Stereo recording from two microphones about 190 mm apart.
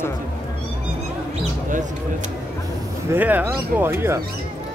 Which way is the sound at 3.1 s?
10° right (ahead or behind).